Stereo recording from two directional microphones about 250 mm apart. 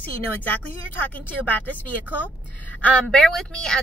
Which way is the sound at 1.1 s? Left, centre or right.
Centre.